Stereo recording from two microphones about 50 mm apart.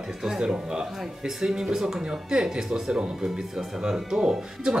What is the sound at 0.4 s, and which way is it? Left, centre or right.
Speech, centre.